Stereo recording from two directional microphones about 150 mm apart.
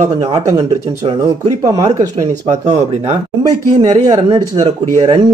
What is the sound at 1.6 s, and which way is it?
Speech, 25° right (ahead or behind).